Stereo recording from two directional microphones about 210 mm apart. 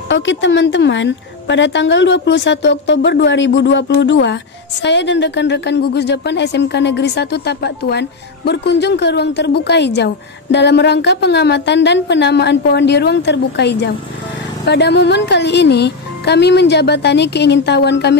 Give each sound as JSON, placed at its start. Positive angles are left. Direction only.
{"t": 0.1, "sound": "a woman's voice", "side_deg": 60}